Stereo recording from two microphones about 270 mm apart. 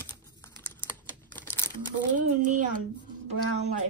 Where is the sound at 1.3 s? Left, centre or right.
Centre.